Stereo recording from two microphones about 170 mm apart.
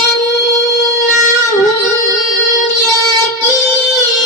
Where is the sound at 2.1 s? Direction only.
Centre (ahead or behind).